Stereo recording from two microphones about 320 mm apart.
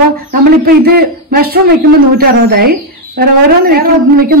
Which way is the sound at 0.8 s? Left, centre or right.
Right.